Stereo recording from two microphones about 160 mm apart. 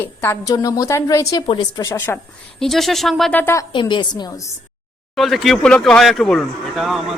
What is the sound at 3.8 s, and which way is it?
Speech, 30° left (ahead or behind).